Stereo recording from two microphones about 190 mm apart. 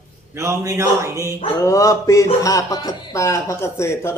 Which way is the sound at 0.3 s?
15° right (ahead or behind).